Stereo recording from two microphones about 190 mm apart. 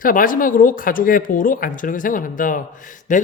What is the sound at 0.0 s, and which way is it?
Speech, 45° left (ahead or behind).